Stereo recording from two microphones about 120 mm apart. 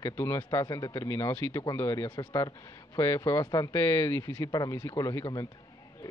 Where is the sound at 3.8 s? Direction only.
20° left (ahead or behind).